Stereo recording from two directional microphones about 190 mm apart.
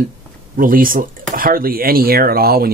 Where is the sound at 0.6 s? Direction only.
45° right (ahead or behind).